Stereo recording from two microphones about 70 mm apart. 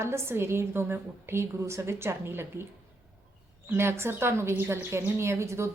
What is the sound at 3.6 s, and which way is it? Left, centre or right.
A woman's voice, right.